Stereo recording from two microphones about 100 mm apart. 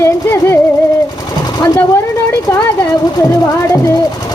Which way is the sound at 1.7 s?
25° left (ahead or behind).